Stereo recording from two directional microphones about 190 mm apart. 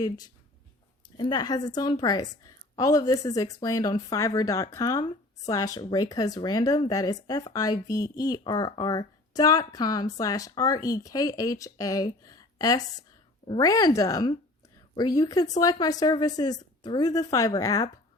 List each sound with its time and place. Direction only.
1.1 s speech: 25° left (ahead or behind)